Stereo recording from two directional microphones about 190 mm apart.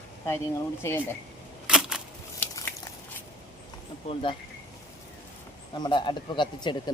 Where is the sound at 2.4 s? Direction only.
10° left (ahead or behind).